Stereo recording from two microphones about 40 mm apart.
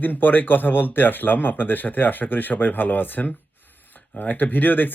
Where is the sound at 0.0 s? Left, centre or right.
Left.